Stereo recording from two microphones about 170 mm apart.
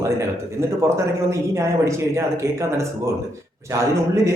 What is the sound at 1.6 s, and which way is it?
Speech, 15° right (ahead or behind).